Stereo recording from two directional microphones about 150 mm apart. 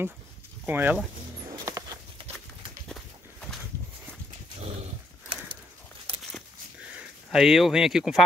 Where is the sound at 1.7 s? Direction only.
20° right (ahead or behind).